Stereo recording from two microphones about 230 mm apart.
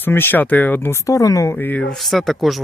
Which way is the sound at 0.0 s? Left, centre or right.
Centre.